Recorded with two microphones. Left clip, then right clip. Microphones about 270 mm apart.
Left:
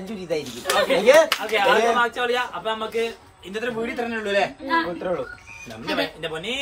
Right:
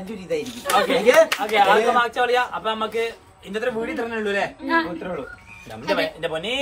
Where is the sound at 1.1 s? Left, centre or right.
Centre.